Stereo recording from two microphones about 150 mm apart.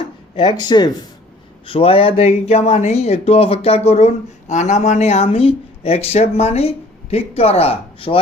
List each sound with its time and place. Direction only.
0.4 s speech: 30° left (ahead or behind)